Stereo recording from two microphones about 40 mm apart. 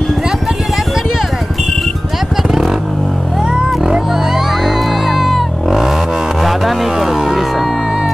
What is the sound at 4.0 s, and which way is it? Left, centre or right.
Music, centre.